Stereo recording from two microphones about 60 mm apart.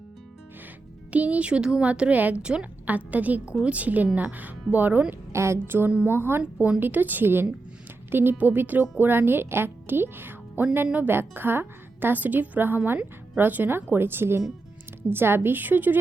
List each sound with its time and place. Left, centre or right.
1.1 s a woman's voice: right
2.8 s speech: right
5.3 s speech: right
6.1 s speech: right